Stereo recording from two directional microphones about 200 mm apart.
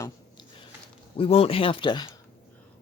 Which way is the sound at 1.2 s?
30° left (ahead or behind).